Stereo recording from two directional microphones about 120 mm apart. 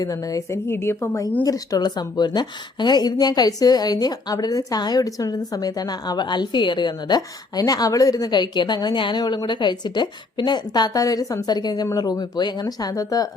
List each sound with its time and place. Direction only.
0.0 s a woman's voice: 30° left (ahead or behind)